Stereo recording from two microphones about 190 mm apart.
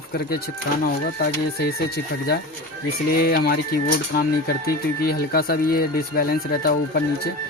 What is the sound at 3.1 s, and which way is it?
Speech, 55° left (ahead or behind).